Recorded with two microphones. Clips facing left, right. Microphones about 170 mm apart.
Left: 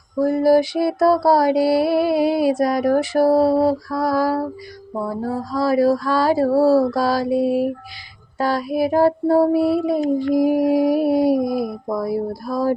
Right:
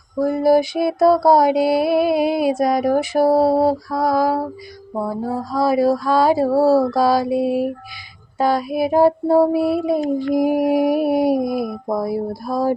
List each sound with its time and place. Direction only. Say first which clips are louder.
0.2 s mantra: even; 20° right (ahead or behind)
3.8 s child singing: right 1 dB; 20° right (ahead or behind)
5.5 s mantra: even; 20° right (ahead or behind)
8.4 s child singing: right 1 dB; 15° right (ahead or behind)